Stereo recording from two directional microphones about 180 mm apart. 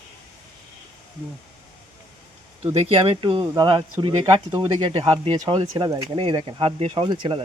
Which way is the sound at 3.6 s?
25° right (ahead or behind).